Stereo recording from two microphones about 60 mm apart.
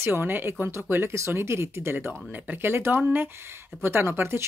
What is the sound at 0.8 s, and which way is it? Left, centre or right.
Speech, right.